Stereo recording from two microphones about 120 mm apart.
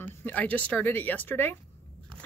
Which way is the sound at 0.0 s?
15° left (ahead or behind).